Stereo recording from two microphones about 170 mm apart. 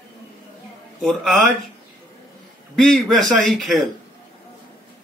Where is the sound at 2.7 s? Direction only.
Centre (ahead or behind).